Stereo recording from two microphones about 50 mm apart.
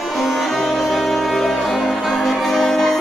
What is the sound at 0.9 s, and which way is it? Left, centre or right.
Music, centre.